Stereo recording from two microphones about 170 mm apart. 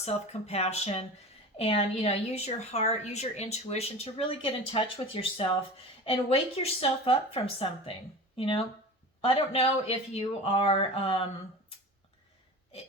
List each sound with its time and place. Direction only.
0.0 s a woman's voice: 40° left (ahead or behind)